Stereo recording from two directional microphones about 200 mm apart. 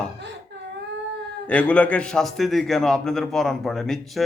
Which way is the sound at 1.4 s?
5° left (ahead or behind).